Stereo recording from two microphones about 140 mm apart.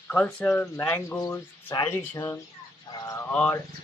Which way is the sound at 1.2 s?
25° left (ahead or behind).